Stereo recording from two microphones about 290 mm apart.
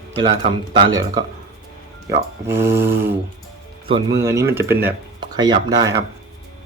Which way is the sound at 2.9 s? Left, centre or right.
Right.